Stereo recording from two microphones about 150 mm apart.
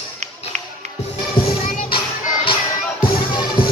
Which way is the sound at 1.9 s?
35° left (ahead or behind).